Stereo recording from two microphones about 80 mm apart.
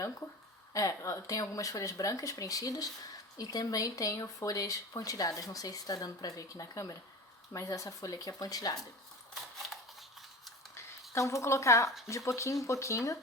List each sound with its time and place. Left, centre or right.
0.7 s speech: left
11.1 s speech: left